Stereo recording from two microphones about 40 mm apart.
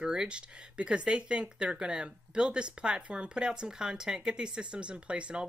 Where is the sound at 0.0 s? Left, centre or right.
Centre.